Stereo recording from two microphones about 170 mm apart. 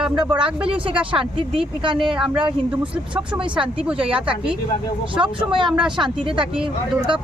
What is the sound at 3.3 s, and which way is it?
Speech, 30° right (ahead or behind).